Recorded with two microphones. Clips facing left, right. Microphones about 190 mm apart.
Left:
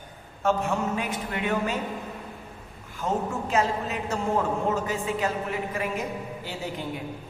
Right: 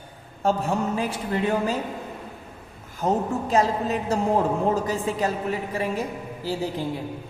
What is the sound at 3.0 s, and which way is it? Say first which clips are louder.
A man's voice: right 4 dB; 35° right (ahead or behind).